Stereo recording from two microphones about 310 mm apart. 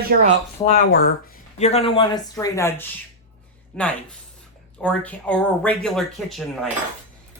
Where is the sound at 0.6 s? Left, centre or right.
Left.